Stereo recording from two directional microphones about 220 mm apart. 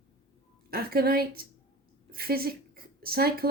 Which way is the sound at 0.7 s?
45° right (ahead or behind).